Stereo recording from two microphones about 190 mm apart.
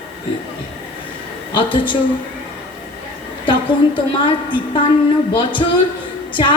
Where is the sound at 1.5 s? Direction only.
25° left (ahead or behind).